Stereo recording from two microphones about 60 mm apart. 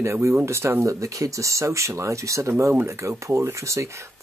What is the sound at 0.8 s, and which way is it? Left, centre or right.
Speech, right.